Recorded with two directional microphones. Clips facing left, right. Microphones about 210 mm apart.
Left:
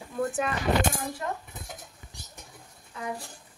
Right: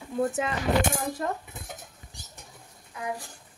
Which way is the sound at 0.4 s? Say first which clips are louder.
Even; 25° right (ahead or behind).